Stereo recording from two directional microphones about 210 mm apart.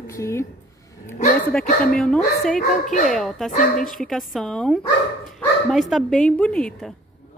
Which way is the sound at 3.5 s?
35° left (ahead or behind).